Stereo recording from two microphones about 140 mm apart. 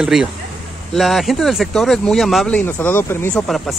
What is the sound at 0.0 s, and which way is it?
Speech, 5° right (ahead or behind).